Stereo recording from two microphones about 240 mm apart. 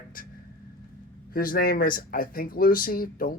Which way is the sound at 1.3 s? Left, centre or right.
Left.